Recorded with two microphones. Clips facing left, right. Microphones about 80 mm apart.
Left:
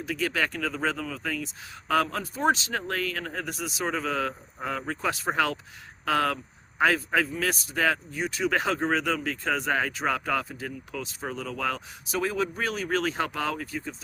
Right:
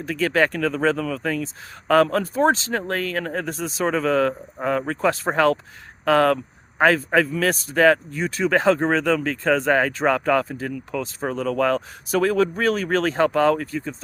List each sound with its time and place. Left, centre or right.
0.0 s speech: right
3.8 s speech: right
11.0 s speech: right